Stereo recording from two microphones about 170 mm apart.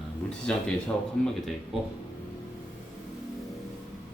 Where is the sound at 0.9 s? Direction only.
10° left (ahead or behind).